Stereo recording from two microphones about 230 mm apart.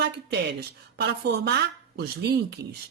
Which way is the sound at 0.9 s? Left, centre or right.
Right.